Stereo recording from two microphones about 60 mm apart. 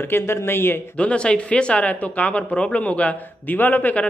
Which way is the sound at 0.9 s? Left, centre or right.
Centre.